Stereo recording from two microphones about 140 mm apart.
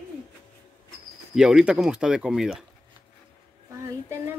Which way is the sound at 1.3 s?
5° right (ahead or behind).